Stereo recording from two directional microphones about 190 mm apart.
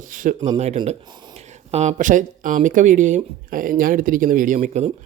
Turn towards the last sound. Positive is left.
turn(degrees=-40)  # may be behind; listen again after turning